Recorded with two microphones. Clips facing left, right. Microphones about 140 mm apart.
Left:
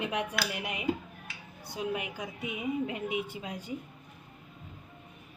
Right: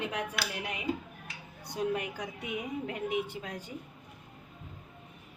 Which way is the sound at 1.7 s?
5° left (ahead or behind).